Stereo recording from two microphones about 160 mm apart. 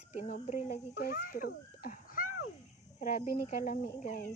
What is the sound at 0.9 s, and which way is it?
A child's voice, 70° left (ahead or behind).